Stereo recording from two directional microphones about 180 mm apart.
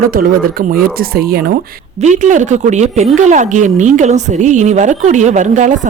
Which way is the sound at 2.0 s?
45° right (ahead or behind).